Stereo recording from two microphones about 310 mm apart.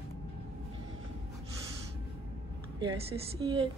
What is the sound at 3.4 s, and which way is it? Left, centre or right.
Speech, centre.